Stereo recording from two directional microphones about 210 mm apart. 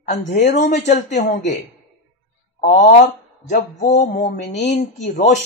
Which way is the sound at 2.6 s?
35° left (ahead or behind).